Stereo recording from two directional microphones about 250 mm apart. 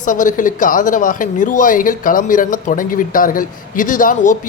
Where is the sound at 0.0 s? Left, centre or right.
Left.